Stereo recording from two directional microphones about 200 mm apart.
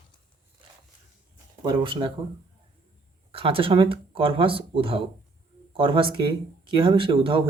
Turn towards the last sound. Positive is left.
turn(degrees=-25)  # may be behind; listen again after turning